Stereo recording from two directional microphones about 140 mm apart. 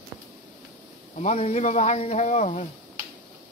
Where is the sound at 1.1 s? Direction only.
50° left (ahead or behind).